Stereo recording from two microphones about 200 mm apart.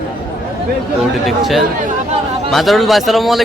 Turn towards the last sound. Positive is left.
turn(degrees=0)  # may be behind; listen again after turning